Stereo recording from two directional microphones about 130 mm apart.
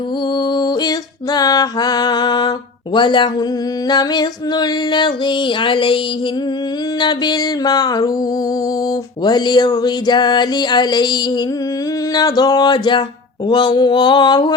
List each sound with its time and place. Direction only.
0.3 s music: 35° left (ahead or behind)
7.0 s music: 35° left (ahead or behind)
9.2 s music: 35° left (ahead or behind)